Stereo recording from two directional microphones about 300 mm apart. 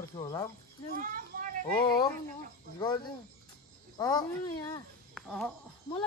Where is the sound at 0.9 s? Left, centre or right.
Right.